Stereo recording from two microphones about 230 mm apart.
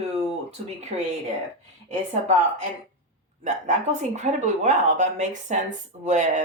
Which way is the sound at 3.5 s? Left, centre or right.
Right.